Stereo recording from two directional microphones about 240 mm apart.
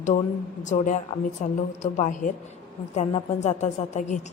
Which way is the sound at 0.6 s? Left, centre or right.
Left.